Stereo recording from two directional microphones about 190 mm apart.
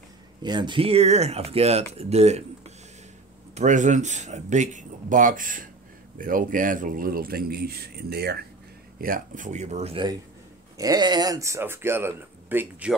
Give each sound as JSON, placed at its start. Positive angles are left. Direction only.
{"t": 0.4, "sound": "speech", "side_deg": -25}
{"t": 9.0, "sound": "speech", "side_deg": -45}
{"t": 10.8, "sound": "speech", "side_deg": -20}